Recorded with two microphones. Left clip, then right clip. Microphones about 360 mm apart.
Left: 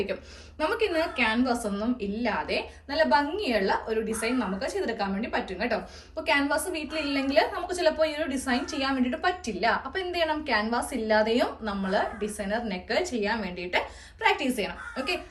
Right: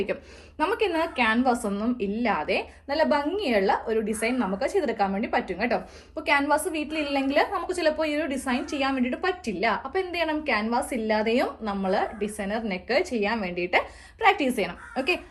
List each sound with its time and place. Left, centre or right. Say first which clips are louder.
0.6 s a woman's voice: right 1 dB; centre
14.2 s a woman's voice: right 3 dB; centre